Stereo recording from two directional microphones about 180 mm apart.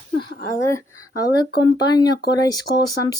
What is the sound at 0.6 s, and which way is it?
Speech, 15° left (ahead or behind).